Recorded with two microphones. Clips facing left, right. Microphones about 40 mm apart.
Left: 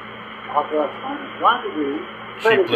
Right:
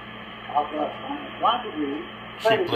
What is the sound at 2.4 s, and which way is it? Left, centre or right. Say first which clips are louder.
Speech: left 5 dB; left.